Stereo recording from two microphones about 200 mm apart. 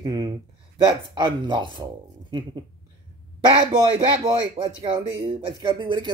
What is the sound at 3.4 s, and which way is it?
Speech, 20° right (ahead or behind).